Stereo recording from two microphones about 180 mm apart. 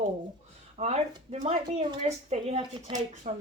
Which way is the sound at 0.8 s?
40° right (ahead or behind).